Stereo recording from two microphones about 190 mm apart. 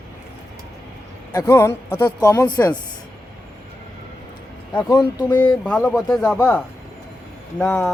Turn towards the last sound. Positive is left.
turn(degrees=5)  # may be behind; listen again after turning